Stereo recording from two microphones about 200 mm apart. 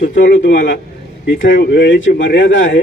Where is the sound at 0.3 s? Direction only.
65° left (ahead or behind).